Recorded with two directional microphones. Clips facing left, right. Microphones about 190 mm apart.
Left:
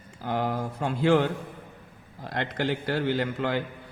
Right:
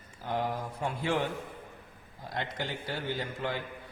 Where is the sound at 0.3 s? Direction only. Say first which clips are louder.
Left 4 dB; 85° left.